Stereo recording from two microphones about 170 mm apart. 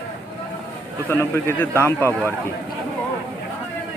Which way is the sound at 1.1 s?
15° left (ahead or behind).